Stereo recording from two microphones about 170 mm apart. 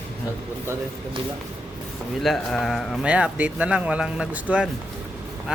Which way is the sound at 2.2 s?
Centre (ahead or behind).